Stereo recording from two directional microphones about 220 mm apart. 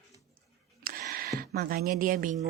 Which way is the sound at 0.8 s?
40° right (ahead or behind).